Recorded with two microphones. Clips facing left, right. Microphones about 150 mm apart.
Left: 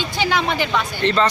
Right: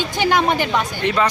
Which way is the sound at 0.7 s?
10° right (ahead or behind).